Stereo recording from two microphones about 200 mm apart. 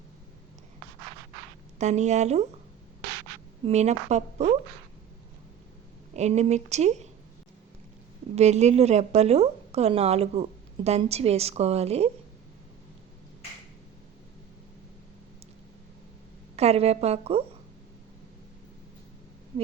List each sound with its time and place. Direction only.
1.8 s a woman's voice: 35° right (ahead or behind)
3.7 s a woman's voice: 35° right (ahead or behind)
6.1 s a woman's voice: 35° right (ahead or behind)
8.4 s a woman's voice: 35° right (ahead or behind)
16.6 s a woman's voice: 30° right (ahead or behind)